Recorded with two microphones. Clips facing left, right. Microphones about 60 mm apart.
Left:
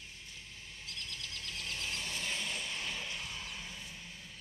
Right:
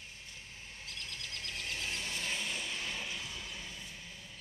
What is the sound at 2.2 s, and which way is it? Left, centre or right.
Vehicle, centre.